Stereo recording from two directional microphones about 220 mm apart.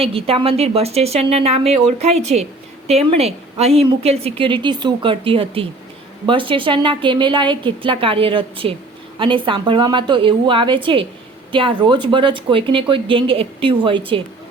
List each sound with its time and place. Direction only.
0.0 s a woman's voice: 25° right (ahead or behind)